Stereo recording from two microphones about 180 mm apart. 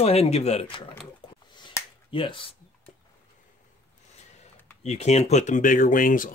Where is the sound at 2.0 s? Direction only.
30° left (ahead or behind).